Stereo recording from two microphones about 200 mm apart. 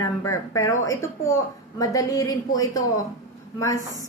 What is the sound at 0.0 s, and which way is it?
A woman's voice, 15° left (ahead or behind).